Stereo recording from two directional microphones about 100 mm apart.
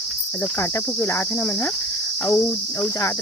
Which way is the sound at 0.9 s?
25° left (ahead or behind).